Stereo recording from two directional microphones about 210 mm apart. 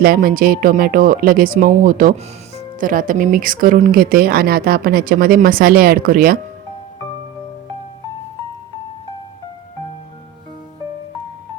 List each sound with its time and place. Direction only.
0.0 s speech: 45° right (ahead or behind)